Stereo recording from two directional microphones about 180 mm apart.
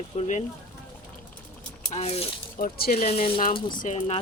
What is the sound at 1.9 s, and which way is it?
Speech, 35° left (ahead or behind).